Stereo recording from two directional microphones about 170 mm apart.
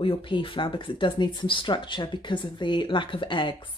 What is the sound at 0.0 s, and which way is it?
Speech, 30° left (ahead or behind).